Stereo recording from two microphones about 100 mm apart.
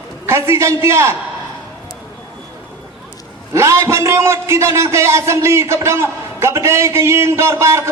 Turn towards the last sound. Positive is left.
turn(degrees=-30)  # may be behind; listen again after turning